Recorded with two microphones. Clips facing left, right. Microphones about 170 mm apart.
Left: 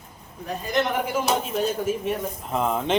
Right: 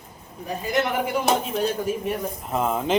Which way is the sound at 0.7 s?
Centre (ahead or behind).